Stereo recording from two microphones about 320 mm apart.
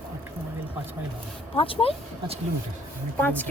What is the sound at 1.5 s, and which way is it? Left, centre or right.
Speech, centre.